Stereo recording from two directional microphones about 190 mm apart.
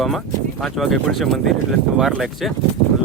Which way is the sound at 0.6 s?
Centre (ahead or behind).